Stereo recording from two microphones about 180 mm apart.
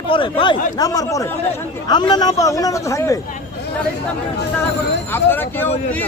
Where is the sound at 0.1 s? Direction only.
30° left (ahead or behind).